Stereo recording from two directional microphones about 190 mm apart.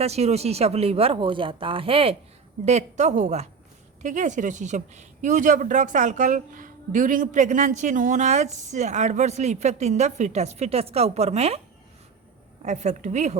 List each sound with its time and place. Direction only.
0.0 s speech: 35° right (ahead or behind)
12.6 s speech: 40° right (ahead or behind)